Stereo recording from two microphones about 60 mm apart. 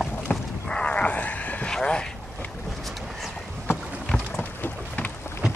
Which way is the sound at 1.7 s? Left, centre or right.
Centre.